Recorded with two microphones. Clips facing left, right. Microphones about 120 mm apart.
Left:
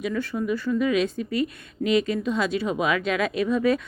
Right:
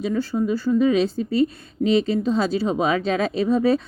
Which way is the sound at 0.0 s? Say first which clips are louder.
Right 4 dB; 30° right (ahead or behind).